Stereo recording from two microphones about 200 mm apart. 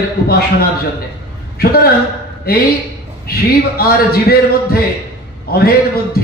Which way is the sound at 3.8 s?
50° left (ahead or behind).